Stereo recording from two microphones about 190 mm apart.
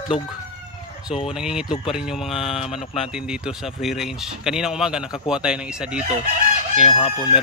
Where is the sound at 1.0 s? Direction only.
5° right (ahead or behind).